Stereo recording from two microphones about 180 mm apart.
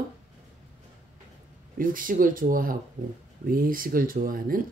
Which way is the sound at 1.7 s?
50° right (ahead or behind).